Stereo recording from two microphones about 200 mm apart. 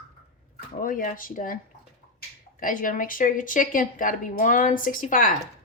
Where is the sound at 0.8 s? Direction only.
45° left (ahead or behind).